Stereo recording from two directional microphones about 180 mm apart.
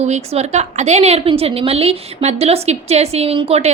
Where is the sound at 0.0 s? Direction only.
40° right (ahead or behind).